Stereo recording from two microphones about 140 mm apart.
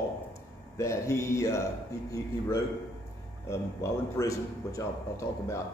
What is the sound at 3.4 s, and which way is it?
Speech, 20° left (ahead or behind).